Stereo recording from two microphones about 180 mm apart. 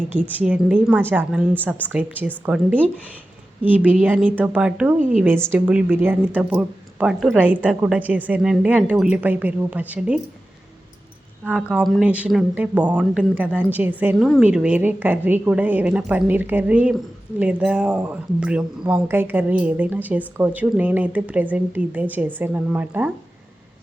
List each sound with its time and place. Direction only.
0.1 s speech: 10° right (ahead or behind)
4.9 s a woman's voice: 45° right (ahead or behind)
5.5 s speech: 5° right (ahead or behind)
11.4 s speech: 5° right (ahead or behind)